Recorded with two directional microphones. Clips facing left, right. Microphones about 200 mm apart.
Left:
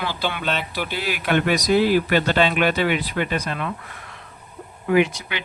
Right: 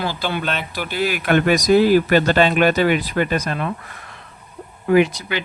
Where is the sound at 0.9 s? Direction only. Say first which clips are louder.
Right 6 dB; 45° right (ahead or behind).